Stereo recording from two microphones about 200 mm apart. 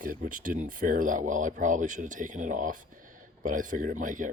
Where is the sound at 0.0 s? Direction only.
40° right (ahead or behind).